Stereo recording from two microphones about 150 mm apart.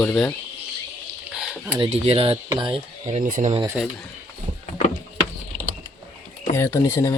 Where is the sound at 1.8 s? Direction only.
40° right (ahead or behind).